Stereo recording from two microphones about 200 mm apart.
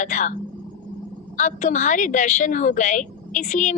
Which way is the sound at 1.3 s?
40° left (ahead or behind).